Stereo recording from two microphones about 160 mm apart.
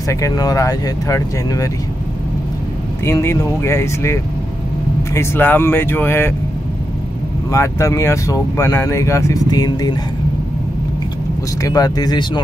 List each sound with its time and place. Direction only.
0.1 s speech: 20° left (ahead or behind)
3.1 s speech: 15° left (ahead or behind)
7.5 s speech: 20° left (ahead or behind)
11.6 s speech: 20° left (ahead or behind)